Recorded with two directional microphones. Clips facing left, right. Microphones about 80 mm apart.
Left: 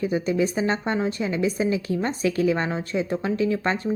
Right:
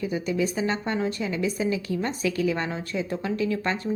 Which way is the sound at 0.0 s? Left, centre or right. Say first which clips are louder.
Left 3 dB; left.